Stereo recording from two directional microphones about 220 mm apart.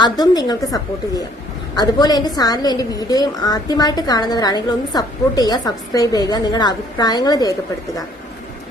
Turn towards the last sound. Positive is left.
turn(degrees=15)  # may be behind; listen again after turning